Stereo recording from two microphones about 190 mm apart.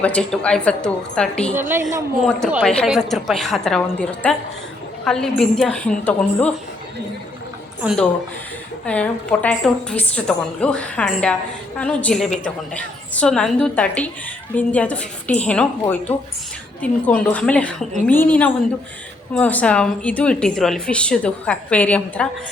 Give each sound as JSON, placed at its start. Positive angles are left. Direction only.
{"t": 0.0, "sound": "a woman's voice", "side_deg": 5}
{"t": 1.5, "sound": "a woman's voice", "side_deg": -10}
{"t": 8.8, "sound": "a woman's voice", "side_deg": 5}